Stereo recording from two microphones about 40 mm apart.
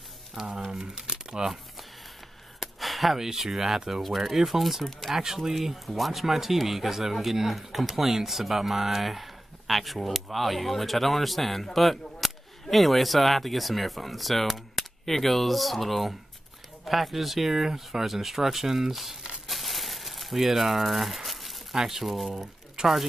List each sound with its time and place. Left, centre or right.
0.7 s speech: centre
2.6 s a sound: centre
3.3 s speech: centre
19.4 s crumpling: centre
21.7 s speech: centre
22.0 s speech: centre
22.8 s speech: right